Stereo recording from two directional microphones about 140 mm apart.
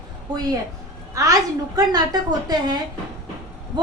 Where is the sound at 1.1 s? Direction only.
25° right (ahead or behind).